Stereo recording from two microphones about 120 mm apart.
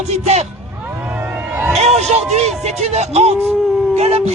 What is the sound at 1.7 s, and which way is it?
A man's voice, 65° right (ahead or behind).